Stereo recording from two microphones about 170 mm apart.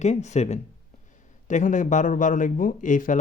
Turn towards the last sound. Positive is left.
turn(degrees=50)  # may be behind; listen again after turning